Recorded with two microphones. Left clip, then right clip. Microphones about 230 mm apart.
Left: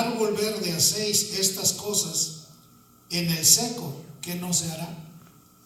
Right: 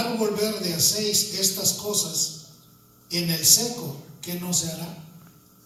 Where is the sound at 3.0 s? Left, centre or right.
Left.